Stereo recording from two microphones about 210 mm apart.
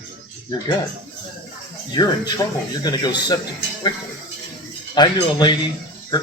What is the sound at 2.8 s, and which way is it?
Speech, 20° left (ahead or behind).